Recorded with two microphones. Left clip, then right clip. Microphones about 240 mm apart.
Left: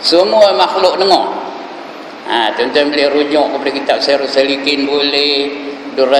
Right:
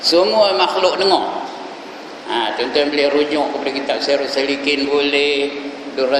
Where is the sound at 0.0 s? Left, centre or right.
Centre.